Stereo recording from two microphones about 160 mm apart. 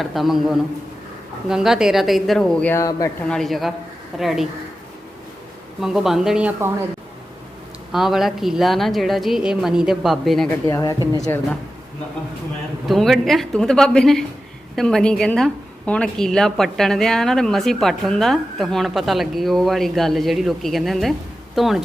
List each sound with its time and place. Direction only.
0.0 s a woman's voice: centre (ahead or behind)
5.8 s a woman's voice: centre (ahead or behind)
7.9 s a woman's voice: centre (ahead or behind)
10.5 s speech: 20° left (ahead or behind)
12.9 s a woman's voice: centre (ahead or behind)